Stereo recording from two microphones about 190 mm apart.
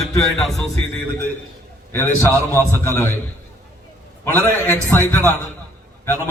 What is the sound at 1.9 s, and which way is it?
A man's voice, 10° left (ahead or behind).